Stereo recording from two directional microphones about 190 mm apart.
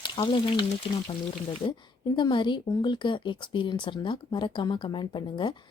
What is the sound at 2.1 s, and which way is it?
Speech, 25° left (ahead or behind).